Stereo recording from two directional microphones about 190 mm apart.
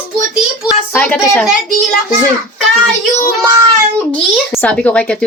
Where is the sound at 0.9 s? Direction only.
10° left (ahead or behind).